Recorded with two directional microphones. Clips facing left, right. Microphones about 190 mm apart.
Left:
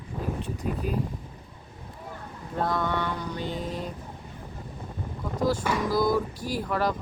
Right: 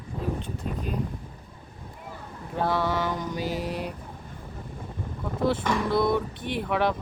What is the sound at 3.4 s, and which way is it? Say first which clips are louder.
Mantra: right 2 dB; 85° right.